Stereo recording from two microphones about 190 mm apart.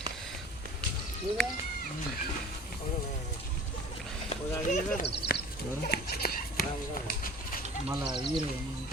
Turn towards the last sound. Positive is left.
turn(degrees=45)  # may be behind; listen again after turning